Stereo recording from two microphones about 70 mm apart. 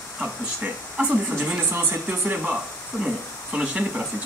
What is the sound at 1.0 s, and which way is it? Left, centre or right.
Speech, right.